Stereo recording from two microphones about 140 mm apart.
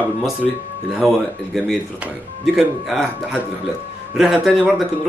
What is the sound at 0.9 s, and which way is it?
Speech, centre (ahead or behind).